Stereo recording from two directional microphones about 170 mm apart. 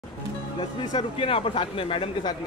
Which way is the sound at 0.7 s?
30° left (ahead or behind).